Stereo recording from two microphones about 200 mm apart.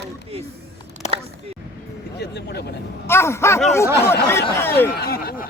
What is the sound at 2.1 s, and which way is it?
Speech, 55° left (ahead or behind).